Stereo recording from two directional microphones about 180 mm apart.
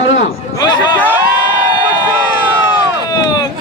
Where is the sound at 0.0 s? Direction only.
90° left.